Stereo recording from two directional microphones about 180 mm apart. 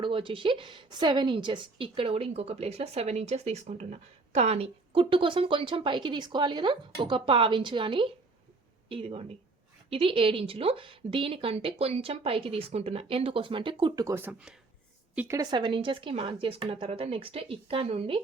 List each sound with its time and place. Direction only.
0.0 s a woman's voice: 30° right (ahead or behind)